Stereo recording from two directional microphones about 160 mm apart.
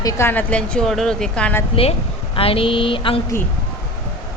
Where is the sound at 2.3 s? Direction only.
35° left (ahead or behind).